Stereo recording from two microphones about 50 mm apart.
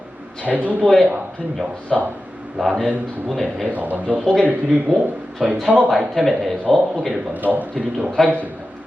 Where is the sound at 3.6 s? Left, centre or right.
Right.